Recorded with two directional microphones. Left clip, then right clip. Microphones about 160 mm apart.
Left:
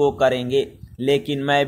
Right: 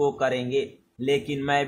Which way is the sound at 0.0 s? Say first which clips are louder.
Left 6 dB; 35° left (ahead or behind).